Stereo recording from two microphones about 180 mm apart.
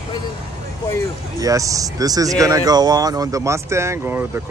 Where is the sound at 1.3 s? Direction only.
20° right (ahead or behind).